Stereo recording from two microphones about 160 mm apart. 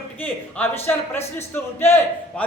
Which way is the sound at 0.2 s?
10° left (ahead or behind).